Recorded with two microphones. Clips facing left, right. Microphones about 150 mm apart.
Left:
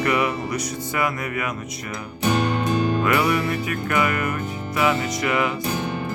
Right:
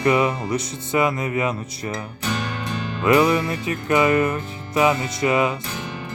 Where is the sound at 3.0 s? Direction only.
20° right (ahead or behind).